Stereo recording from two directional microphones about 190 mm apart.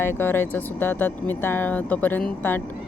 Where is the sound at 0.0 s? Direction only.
10° left (ahead or behind).